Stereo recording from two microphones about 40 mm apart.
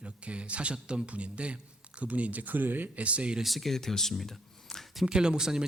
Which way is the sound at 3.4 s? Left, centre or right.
Centre.